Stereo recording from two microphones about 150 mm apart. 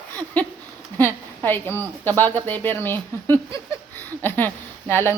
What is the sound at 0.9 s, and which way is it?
A woman's voice, 15° left (ahead or behind).